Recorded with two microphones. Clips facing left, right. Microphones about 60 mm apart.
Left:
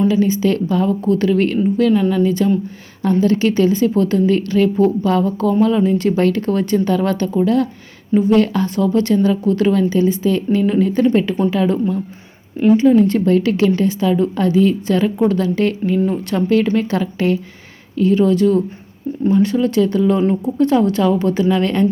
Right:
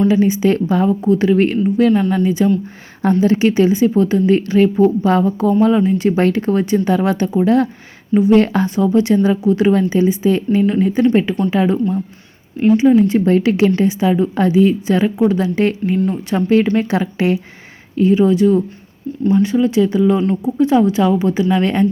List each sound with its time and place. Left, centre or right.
0.1 s a woman's voice: centre
2.2 s a woman's voice: centre
6.1 s speech: right
6.4 s a woman's voice: centre
7.4 s a woman's voice: right
8.6 s a woman's voice: centre
13.2 s a woman's voice: right